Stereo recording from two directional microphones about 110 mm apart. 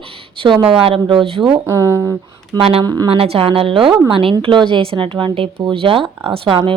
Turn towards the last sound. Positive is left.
turn(degrees=-50)  # may be behind; listen again after turning